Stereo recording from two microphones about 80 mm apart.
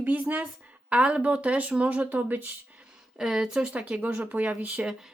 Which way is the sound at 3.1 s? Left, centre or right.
Centre.